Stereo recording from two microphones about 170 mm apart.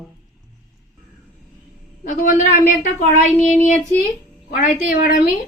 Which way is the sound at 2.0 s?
55° left (ahead or behind).